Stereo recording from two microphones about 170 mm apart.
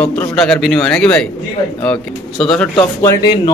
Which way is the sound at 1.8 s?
10° left (ahead or behind).